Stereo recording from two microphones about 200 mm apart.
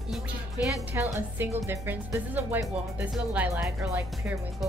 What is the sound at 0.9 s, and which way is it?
Speech, 15° right (ahead or behind).